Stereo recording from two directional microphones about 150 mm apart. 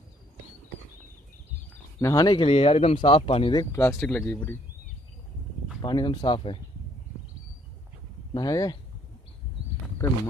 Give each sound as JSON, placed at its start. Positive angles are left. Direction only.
{"t": 2.0, "sound": "speech", "side_deg": 25}
{"t": 2.4, "sound": "speech", "side_deg": 40}
{"t": 3.5, "sound": "speech", "side_deg": 15}
{"t": 5.8, "sound": "speech", "side_deg": 30}
{"t": 8.3, "sound": "speech", "side_deg": 25}